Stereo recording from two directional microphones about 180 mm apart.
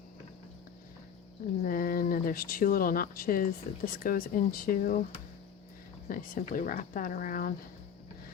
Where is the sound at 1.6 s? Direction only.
50° left (ahead or behind).